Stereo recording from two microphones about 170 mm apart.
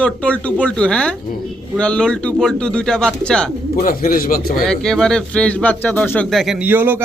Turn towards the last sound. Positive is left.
turn(degrees=-10)  # may be behind; listen again after turning